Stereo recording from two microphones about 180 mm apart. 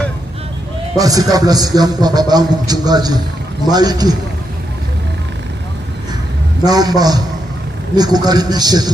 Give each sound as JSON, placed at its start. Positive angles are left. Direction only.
{"t": 0.9, "sound": "a man's voice", "side_deg": -20}
{"t": 6.7, "sound": "a man's voice", "side_deg": -20}